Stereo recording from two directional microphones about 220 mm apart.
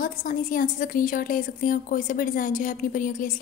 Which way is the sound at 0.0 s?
35° left (ahead or behind).